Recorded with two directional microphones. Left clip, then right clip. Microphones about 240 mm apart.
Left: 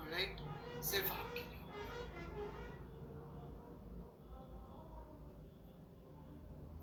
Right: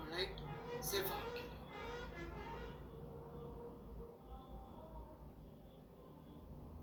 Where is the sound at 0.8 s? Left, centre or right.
Centre.